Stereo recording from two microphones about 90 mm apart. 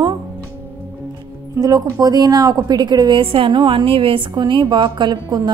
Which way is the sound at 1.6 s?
45° right (ahead or behind).